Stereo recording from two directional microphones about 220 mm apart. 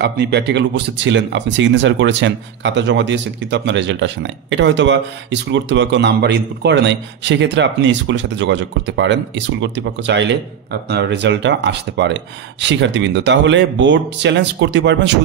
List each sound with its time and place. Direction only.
0.0 s speech: 50° right (ahead or behind)